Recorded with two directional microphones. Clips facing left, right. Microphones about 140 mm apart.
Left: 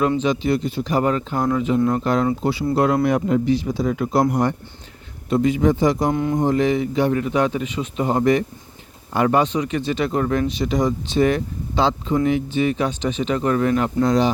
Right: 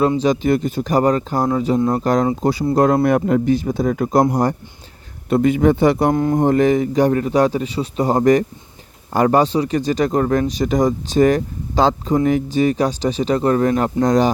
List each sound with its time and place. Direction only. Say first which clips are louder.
0.2 s speech: right 3 dB; 45° right (ahead or behind)
5.3 s speech: right 3 dB; 55° right (ahead or behind)
6.1 s speech: right 4 dB; 40° right (ahead or behind)
6.4 s speech: right 4 dB; 50° right (ahead or behind)